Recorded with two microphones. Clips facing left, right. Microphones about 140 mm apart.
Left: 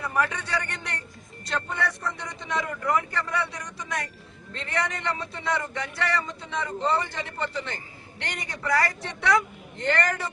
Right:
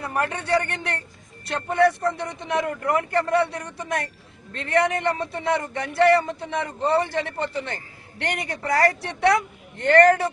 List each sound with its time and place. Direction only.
0.0 s a man's voice: 60° right (ahead or behind)